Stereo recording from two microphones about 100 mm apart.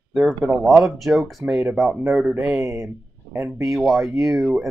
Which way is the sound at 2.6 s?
30° right (ahead or behind).